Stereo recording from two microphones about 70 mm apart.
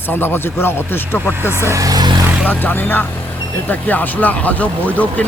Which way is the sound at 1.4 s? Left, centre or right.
Right.